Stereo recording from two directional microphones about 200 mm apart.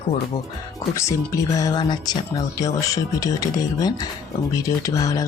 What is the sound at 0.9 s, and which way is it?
Music, 15° left (ahead or behind).